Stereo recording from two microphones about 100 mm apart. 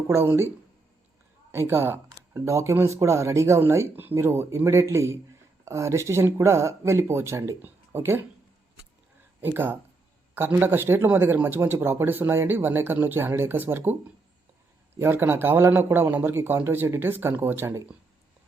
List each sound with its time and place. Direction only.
0.1 s speech: 25° right (ahead or behind)
1.5 s speech: 20° right (ahead or behind)
9.4 s speech: 20° right (ahead or behind)
14.9 s speech: 25° right (ahead or behind)